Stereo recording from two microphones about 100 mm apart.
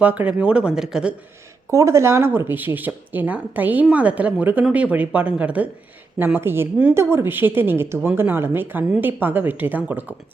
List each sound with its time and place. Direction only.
0.0 s speech: 15° right (ahead or behind)
1.7 s a woman's voice: 30° right (ahead or behind)